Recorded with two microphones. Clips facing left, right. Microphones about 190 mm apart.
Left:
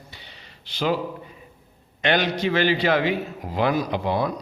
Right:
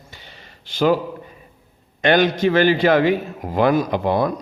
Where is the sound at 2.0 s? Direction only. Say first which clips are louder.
Right 6 dB; 45° right (ahead or behind).